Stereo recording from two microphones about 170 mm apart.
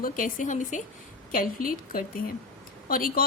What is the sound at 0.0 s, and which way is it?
A woman's voice, 50° left (ahead or behind).